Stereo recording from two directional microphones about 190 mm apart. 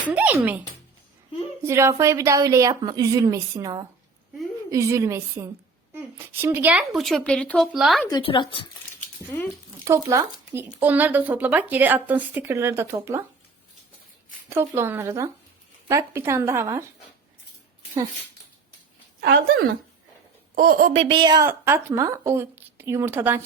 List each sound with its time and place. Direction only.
0.0 s speech: 10° right (ahead or behind)
1.6 s a woman's voice: 15° right (ahead or behind)
8.1 s speech: 25° left (ahead or behind)
9.3 s speech: 15° left (ahead or behind)
9.8 s speech: 15° right (ahead or behind)
14.5 s speech: 15° right (ahead or behind)
20.6 s speech: 45° right (ahead or behind)
20.9 s speech: 30° right (ahead or behind); by 23.4 s 10° right (ahead or behind)